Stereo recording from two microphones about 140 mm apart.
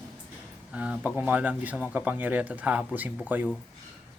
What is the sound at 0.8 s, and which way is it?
Speech, 10° right (ahead or behind).